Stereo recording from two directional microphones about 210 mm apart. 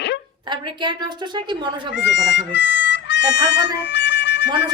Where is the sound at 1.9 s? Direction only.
55° left (ahead or behind).